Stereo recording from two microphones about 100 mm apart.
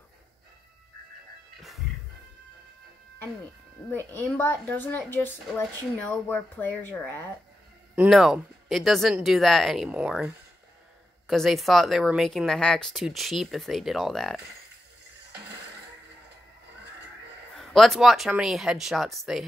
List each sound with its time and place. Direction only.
3.9 s a woman's voice: 20° left (ahead or behind)
8.1 s speech: centre (ahead or behind)
9.8 s speech: 10° right (ahead or behind)
11.2 s speech: centre (ahead or behind)
17.6 s speech: centre (ahead or behind)